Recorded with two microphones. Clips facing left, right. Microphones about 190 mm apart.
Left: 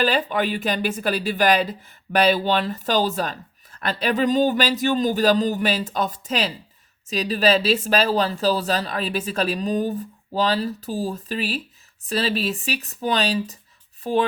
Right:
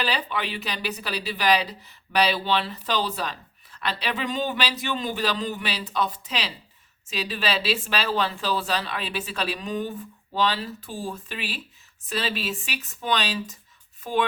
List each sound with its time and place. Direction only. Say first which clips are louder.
0.0 s speech: left 7 dB; 45° left (ahead or behind)